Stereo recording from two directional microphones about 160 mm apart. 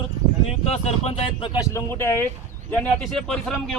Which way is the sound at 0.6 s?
40° left (ahead or behind).